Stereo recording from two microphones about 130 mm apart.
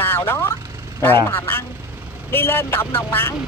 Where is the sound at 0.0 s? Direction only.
20° left (ahead or behind).